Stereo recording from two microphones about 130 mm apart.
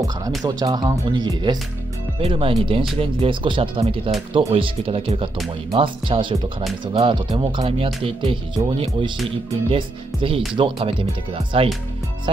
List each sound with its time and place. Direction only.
0.4 s speech: 30° right (ahead or behind)
2.1 s speech: 45° right (ahead or behind)